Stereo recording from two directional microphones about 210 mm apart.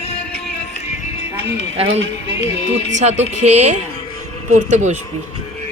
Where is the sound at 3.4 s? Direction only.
30° right (ahead or behind).